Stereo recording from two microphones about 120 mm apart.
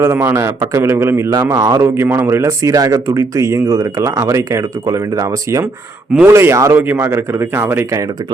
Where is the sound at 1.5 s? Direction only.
30° right (ahead or behind).